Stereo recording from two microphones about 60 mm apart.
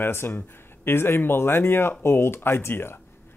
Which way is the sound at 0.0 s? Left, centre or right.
Left.